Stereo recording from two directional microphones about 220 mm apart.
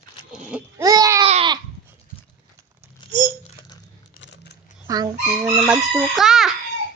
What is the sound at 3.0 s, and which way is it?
Babbling, 20° left (ahead or behind).